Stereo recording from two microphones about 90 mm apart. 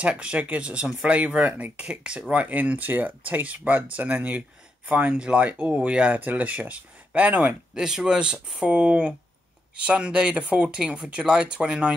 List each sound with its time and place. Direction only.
0.0 s speech: 10° right (ahead or behind)